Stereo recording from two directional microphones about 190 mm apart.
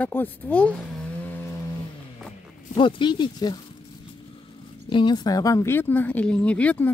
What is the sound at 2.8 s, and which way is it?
Speech, 25° left (ahead or behind).